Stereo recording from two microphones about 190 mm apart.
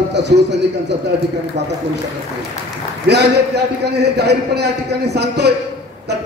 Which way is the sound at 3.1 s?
60° right (ahead or behind).